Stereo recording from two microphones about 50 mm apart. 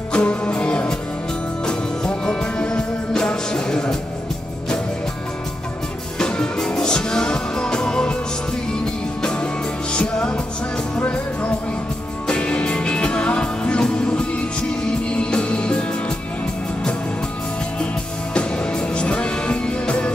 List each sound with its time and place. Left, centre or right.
0.1 s music: left
6.1 s music: centre
9.2 s music: centre
12.3 s music: left
18.3 s music: centre